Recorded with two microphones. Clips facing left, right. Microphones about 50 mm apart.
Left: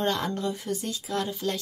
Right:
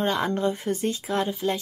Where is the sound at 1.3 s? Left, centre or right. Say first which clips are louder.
Right 4 dB; centre.